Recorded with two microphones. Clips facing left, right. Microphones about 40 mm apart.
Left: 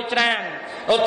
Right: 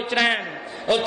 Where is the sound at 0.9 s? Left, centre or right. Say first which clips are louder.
Left 3 dB; centre.